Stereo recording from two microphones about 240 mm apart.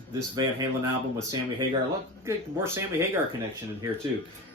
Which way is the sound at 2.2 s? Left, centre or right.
Centre.